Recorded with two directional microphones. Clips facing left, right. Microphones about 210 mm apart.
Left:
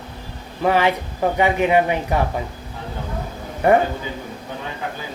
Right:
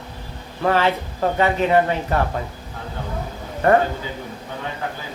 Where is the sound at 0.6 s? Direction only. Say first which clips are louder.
Left 1 dB; 15° left (ahead or behind).